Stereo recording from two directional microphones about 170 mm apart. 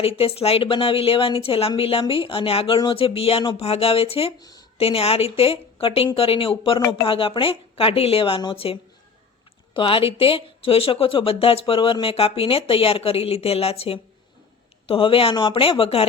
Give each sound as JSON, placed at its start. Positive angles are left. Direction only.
{"t": 0.2, "sound": "speech", "side_deg": 35}
{"t": 4.4, "sound": "a woman's voice", "side_deg": 25}
{"t": 4.8, "sound": "speech", "side_deg": 35}